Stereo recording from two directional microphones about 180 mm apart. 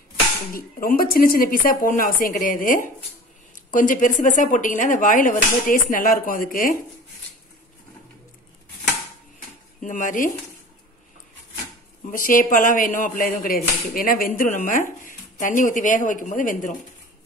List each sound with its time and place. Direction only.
0.6 s speech: 55° left (ahead or behind)
9.8 s speech: 45° left (ahead or behind)
12.1 s speech: 50° left (ahead or behind)